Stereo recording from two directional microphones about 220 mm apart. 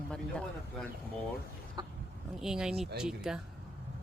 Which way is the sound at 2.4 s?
5° right (ahead or behind).